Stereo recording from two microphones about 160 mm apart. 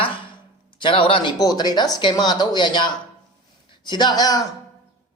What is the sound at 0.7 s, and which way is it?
Speech, 30° left (ahead or behind).